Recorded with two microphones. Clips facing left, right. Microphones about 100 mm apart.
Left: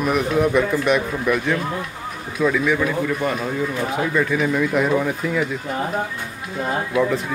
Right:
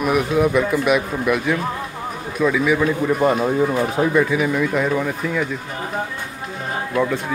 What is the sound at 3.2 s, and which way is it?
Speech, 30° right (ahead or behind).